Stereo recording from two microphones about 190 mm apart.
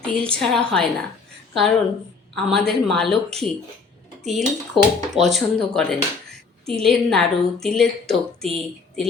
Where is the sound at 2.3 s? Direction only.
Centre (ahead or behind).